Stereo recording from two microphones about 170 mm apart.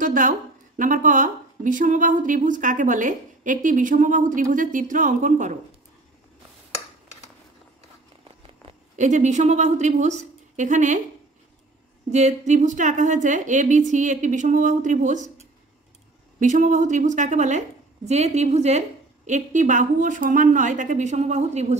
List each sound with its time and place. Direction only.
0.0 s a woman's voice: 50° right (ahead or behind)
8.9 s a woman's voice: 45° right (ahead or behind)
12.1 s a woman's voice: 45° right (ahead or behind)
16.3 s a woman's voice: 50° right (ahead or behind)